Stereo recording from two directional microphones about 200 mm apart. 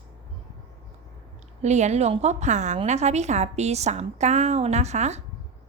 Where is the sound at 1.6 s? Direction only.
35° right (ahead or behind).